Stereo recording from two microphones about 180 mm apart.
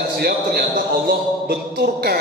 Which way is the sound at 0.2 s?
60° right (ahead or behind).